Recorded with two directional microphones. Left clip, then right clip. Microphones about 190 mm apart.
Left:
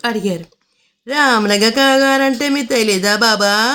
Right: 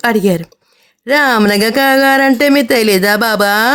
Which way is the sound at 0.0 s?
40° right (ahead or behind).